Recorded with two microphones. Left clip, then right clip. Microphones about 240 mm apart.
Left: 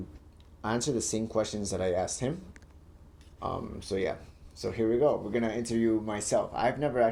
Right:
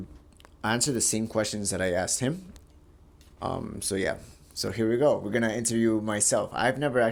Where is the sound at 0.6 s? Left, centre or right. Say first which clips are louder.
Right 3 dB; right.